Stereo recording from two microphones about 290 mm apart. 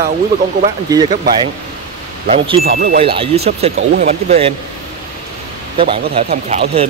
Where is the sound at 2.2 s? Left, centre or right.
Right.